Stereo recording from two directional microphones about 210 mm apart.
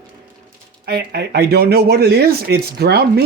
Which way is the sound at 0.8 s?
50° right (ahead or behind).